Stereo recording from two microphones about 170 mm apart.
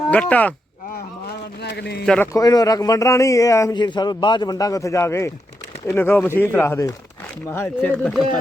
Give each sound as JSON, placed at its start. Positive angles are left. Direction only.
{"t": 0.1, "sound": "speech", "side_deg": 10}
{"t": 1.6, "sound": "a man's voice", "side_deg": 75}
{"t": 2.0, "sound": "a man's voice", "side_deg": 10}